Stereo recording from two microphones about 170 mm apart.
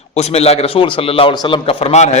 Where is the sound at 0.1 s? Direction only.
40° left (ahead or behind).